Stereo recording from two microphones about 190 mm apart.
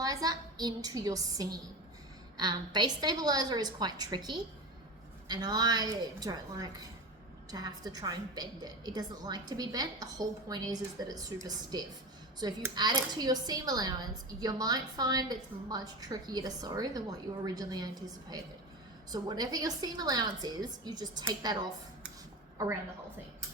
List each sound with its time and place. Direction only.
0.0 s a woman's voice: 20° right (ahead or behind)
12.7 s a woman's voice: 20° right (ahead or behind)